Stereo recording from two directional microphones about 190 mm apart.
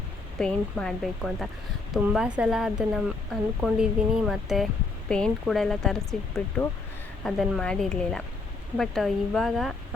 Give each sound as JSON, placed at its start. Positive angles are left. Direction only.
{"t": 0.3, "sound": "speech", "side_deg": 5}